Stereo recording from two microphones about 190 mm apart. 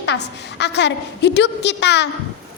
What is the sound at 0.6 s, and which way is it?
A woman's voice, 65° left (ahead or behind).